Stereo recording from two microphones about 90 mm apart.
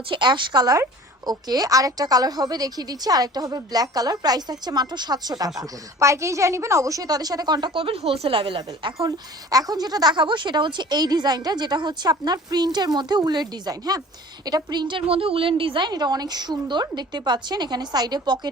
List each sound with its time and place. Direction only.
0.1 s a woman's voice: 60° right (ahead or behind)
5.5 s speech: 35° right (ahead or behind); by 9.0 s 70° right (ahead or behind)
9.0 s speech: 40° right (ahead or behind)